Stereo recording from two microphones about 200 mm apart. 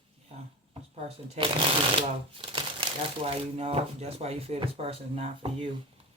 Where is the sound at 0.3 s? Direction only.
30° right (ahead or behind).